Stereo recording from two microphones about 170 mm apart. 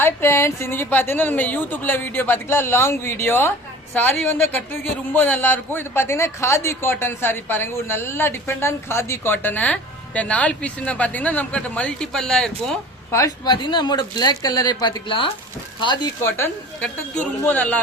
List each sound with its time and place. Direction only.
0.0 s a man's voice: 15° left (ahead or behind)
13.1 s speech: 20° left (ahead or behind)
16.2 s a man's voice: 10° left (ahead or behind)